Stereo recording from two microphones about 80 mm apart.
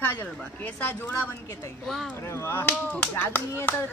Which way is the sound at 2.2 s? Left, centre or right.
Left.